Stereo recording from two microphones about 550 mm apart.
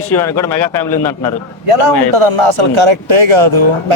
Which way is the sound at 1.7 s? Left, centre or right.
Right.